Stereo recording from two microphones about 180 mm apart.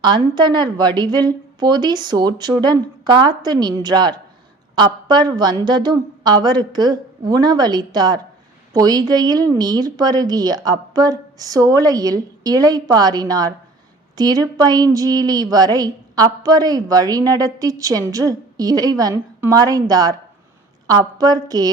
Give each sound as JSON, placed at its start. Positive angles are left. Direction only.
{"t": 0.0, "sound": "a woman's voice", "side_deg": -25}